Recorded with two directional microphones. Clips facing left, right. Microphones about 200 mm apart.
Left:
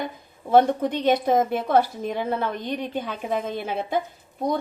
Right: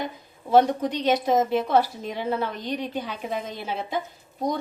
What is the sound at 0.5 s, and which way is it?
A woman's voice, 55° left (ahead or behind).